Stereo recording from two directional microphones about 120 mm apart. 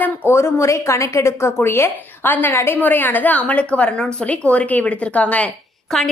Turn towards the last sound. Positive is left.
turn(degrees=0)  # may be behind; listen again after turning